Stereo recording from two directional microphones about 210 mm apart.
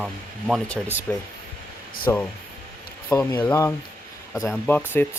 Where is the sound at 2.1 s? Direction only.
15° left (ahead or behind).